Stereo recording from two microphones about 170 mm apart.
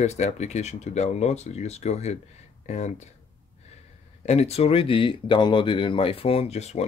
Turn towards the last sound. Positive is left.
turn(degrees=40)  # may be behind; listen again after turning